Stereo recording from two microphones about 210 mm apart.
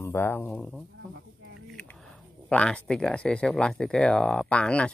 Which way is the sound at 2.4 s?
5° left (ahead or behind).